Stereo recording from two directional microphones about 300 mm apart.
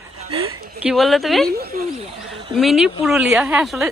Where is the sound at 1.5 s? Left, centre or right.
Right.